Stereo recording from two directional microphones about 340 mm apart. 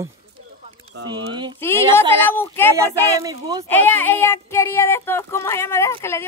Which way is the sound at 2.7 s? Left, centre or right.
Centre.